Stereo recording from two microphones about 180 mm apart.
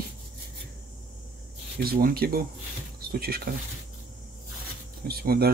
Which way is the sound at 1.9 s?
55° right (ahead or behind).